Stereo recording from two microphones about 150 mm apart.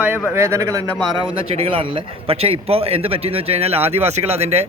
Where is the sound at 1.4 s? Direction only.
40° right (ahead or behind).